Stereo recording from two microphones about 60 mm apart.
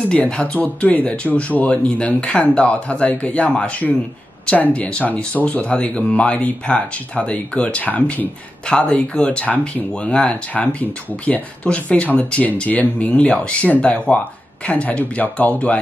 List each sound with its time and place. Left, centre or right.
0.3 s speech: left
8.6 s speech: centre